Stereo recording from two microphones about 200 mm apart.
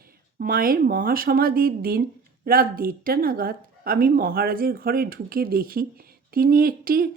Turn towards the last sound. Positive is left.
turn(degrees=-45)  # may be behind; listen again after turning